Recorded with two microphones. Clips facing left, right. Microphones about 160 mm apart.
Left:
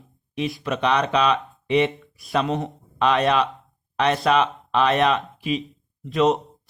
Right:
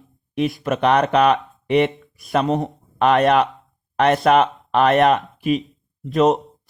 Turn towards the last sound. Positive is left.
turn(degrees=-45)  # may be behind; listen again after turning